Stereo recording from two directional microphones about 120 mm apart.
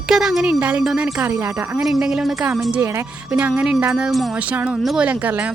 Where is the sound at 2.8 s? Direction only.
20° right (ahead or behind).